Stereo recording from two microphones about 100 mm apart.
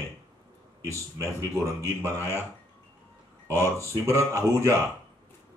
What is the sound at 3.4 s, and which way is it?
A man's voice, 25° left (ahead or behind).